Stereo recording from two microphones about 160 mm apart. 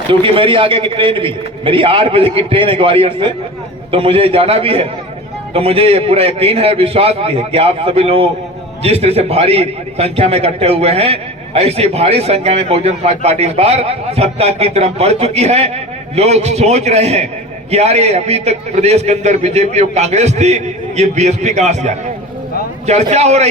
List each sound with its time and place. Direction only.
0.1 s a man's voice: 35° right (ahead or behind)